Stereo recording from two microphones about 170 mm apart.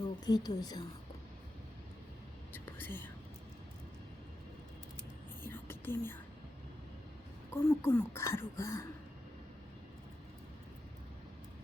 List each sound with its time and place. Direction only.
0.3 s a woman's voice: 25° left (ahead or behind)
2.5 s whispering: 10° left (ahead or behind)
5.4 s whispering: 15° left (ahead or behind)
7.5 s speech: 15° left (ahead or behind)